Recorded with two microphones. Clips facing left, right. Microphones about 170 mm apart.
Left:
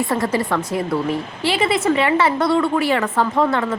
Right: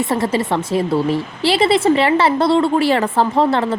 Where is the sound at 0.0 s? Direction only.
25° right (ahead or behind).